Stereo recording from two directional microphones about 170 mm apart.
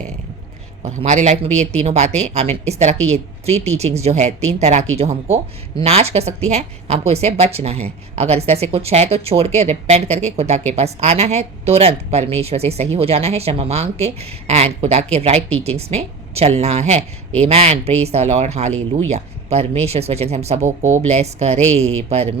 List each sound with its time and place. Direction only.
0.9 s a woman's voice: 40° right (ahead or behind)